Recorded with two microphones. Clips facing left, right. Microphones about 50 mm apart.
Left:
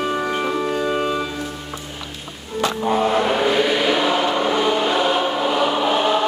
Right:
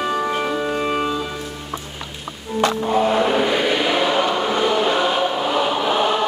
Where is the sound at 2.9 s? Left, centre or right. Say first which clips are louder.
Left 1 dB; centre.